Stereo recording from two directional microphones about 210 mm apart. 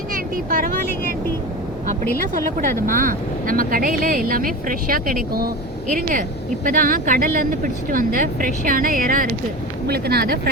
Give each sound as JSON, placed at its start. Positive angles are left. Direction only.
{"t": 0.1, "sound": "vehicle", "side_deg": -40}
{"t": 2.3, "sound": "speech", "side_deg": -40}